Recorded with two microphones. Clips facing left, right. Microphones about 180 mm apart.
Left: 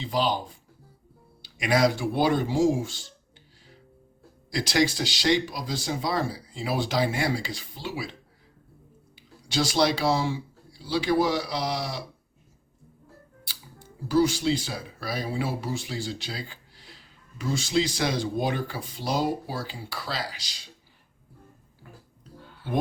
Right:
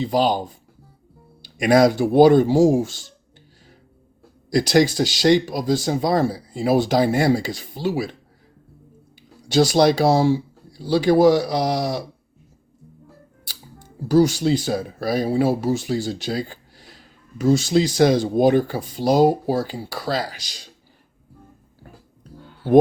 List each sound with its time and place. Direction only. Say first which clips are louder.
0.0 s speech: right 7 dB; 45° right (ahead or behind)
1.5 s speech: right 8 dB; 45° right (ahead or behind)
4.5 s speech: right 8 dB; 45° right (ahead or behind)
9.5 s speech: right 8 dB; 40° right (ahead or behind)
14.1 s speech: right 6 dB; 40° right (ahead or behind)